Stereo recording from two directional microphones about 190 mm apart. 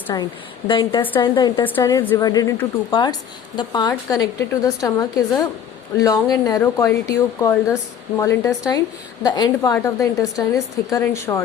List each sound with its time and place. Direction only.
0.1 s a woman's voice: 20° left (ahead or behind)